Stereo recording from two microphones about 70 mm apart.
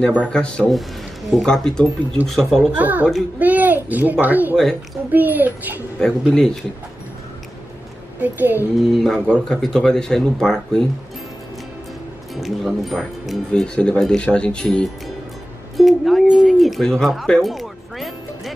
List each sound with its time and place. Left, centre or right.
0.2 s speech: centre
2.8 s a child's voice: right
5.9 s speech: centre
8.2 s a child's voice: right
8.7 s speech: centre
12.4 s speech: centre
13.5 s speech: centre
15.8 s speech: centre
17.0 s music: centre